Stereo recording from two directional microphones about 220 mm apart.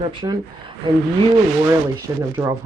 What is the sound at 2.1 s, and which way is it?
Speech, 15° right (ahead or behind).